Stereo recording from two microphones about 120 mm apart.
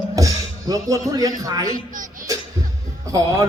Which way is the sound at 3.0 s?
25° right (ahead or behind).